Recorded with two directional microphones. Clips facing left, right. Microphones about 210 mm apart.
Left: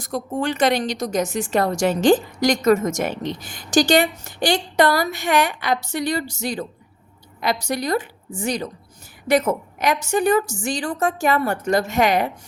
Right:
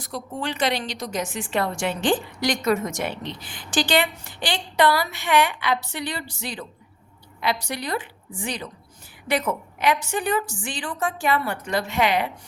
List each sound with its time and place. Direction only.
0.0 s a woman's voice: 45° left (ahead or behind)